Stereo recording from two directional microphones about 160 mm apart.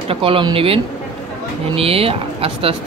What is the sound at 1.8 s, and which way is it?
Speech, 35° right (ahead or behind).